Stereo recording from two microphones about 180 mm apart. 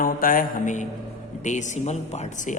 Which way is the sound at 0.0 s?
50° left (ahead or behind).